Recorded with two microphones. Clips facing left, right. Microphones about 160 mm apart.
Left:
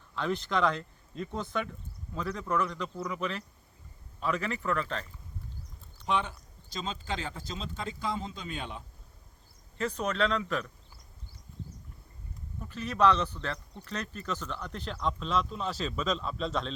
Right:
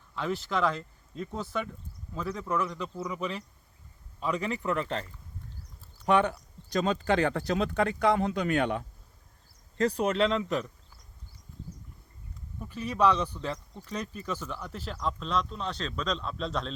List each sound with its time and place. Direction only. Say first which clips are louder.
0.2 s a man's voice: even; 5° right (ahead or behind); by 5.0 s 25° right (ahead or behind)
6.1 s speech: right 7 dB; 60° right (ahead or behind)
9.8 s speech: right 4 dB; 30° right (ahead or behind)
12.5 s a man's voice: right 1 dB; 10° right (ahead or behind)